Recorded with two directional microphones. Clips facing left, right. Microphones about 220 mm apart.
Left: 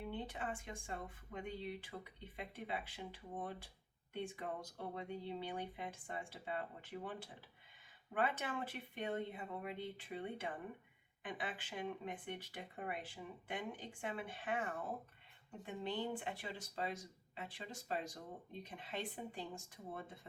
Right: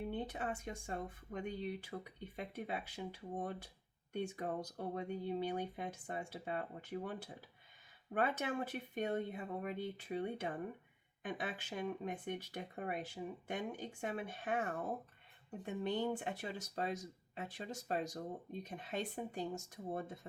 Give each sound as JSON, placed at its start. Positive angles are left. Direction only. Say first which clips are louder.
{"t": 0.1, "sound": "speech", "louder": "right 3 dB", "side_deg": -40}